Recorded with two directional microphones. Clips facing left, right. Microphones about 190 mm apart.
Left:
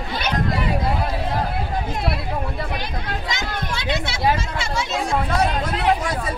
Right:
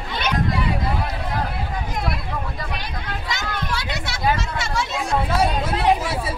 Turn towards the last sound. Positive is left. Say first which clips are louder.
# right 1 dB
turn(degrees=-5)  # may be behind; listen again after turning